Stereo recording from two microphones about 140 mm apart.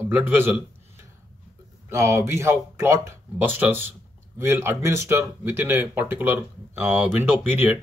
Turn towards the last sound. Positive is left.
turn(degrees=-15)  # may be behind; listen again after turning